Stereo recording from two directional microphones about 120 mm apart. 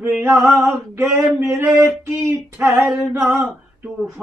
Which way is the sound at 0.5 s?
20° right (ahead or behind).